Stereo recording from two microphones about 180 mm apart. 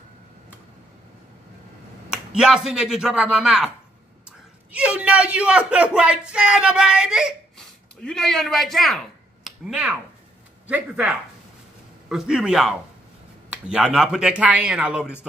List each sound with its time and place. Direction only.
2.0 s speech: 5° right (ahead or behind)
4.7 s speech: 5° right (ahead or behind)